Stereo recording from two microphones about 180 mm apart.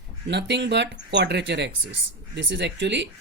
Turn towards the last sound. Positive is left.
turn(degrees=-75)  # may be behind; listen again after turning